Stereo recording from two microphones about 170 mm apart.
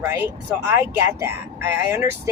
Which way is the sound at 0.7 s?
15° right (ahead or behind).